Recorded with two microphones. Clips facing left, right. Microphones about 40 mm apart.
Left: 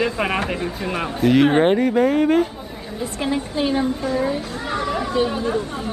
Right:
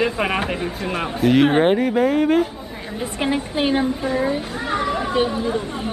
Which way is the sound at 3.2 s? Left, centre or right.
Right.